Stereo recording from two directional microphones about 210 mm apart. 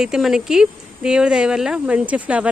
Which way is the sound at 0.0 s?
Centre (ahead or behind).